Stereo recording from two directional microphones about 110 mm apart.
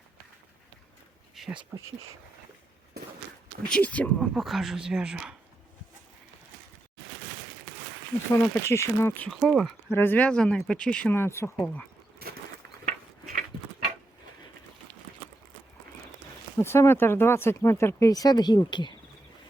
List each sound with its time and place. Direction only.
3.7 s speech: 15° left (ahead or behind)
4.2 s speech: centre (ahead or behind)
8.3 s speech: 25° left (ahead or behind)
9.3 s speech: centre (ahead or behind)
9.9 s speech: 20° left (ahead or behind)
11.1 s speech: 20° left (ahead or behind)
16.6 s speech: 25° left (ahead or behind); by 18.9 s 45° left (ahead or behind)